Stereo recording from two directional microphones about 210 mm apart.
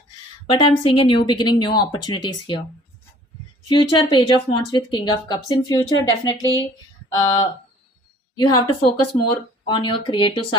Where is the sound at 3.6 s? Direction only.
25° left (ahead or behind).